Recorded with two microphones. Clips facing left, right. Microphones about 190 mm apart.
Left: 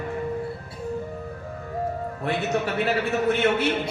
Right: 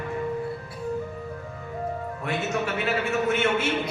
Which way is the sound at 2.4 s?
35° left (ahead or behind).